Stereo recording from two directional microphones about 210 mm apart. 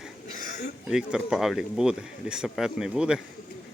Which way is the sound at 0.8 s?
5° right (ahead or behind).